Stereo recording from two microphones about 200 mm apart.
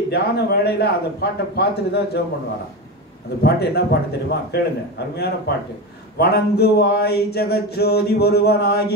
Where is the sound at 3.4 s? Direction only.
55° left (ahead or behind).